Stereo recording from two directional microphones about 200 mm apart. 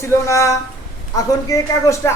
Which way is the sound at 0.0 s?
15° left (ahead or behind).